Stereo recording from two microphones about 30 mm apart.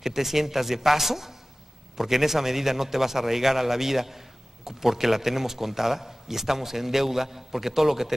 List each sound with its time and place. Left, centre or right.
0.0 s a man's voice: centre